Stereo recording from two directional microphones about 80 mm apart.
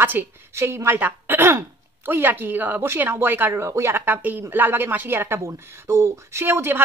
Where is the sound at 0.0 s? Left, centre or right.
Right.